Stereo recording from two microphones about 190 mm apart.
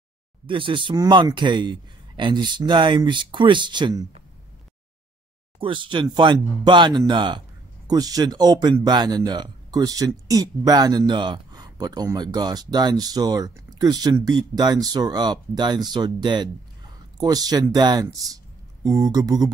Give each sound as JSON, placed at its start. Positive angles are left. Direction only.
{"t": 0.5, "sound": "speech", "side_deg": -25}
{"t": 5.6, "sound": "speech", "side_deg": -25}